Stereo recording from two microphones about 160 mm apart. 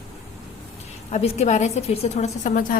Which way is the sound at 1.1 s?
40° left (ahead or behind).